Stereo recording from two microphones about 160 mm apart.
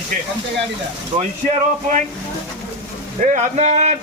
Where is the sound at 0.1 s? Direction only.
60° right (ahead or behind).